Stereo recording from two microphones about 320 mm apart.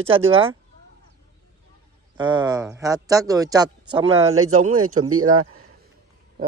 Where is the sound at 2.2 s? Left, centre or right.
Centre.